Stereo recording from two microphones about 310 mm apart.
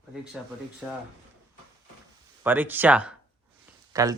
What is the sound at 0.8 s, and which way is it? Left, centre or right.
Speech, centre.